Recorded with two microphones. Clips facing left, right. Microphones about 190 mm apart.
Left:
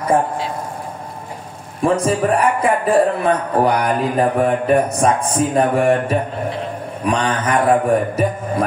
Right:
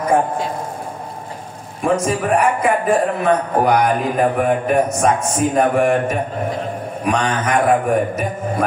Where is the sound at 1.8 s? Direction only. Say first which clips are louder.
Left 2 dB; 35° left (ahead or behind).